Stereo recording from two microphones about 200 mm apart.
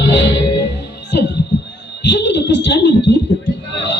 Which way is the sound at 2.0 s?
60° left (ahead or behind).